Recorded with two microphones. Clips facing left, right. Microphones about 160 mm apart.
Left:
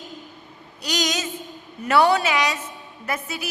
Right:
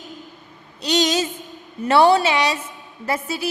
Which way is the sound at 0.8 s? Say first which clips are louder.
Right 6 dB; 30° right (ahead or behind).